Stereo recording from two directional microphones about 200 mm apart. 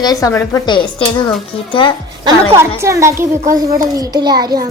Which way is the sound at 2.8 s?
15° right (ahead or behind).